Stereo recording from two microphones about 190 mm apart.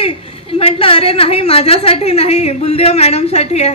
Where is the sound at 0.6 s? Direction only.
30° left (ahead or behind).